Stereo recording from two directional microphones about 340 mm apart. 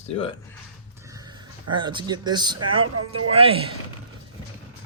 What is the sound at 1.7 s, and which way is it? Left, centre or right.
Speech, centre.